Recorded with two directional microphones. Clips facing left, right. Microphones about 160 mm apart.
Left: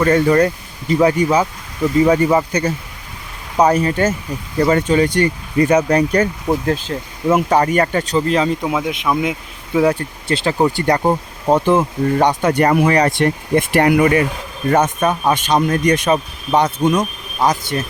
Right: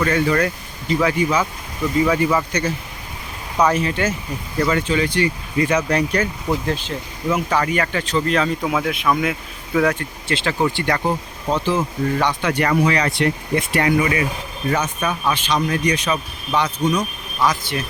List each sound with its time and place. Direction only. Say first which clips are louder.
0.0 s speech: left 5 dB; 40° left (ahead or behind)
3.6 s speech: left 4 dB; 40° left (ahead or behind)
8.6 s speech: left 1 dB; 20° left (ahead or behind)
10.2 s speech: left 4 dB; 40° left (ahead or behind); by 11.9 s 55° left (ahead or behind)
12.1 s speech: left 7 dB; 40° left (ahead or behind)